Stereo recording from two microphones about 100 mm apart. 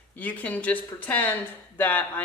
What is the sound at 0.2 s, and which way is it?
A woman's voice, 15° left (ahead or behind).